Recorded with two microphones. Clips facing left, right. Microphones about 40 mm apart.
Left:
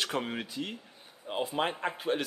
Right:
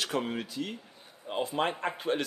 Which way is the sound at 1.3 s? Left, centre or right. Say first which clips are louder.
Right 1 dB; centre.